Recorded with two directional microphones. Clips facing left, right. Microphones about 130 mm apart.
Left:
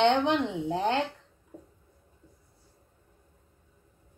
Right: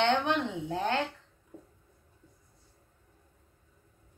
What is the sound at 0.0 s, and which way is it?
Speech, 20° left (ahead or behind).